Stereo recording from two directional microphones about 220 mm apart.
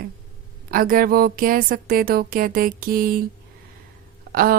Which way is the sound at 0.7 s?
40° right (ahead or behind).